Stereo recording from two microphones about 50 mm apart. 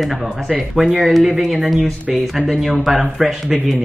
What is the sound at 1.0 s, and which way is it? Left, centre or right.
Speech, centre.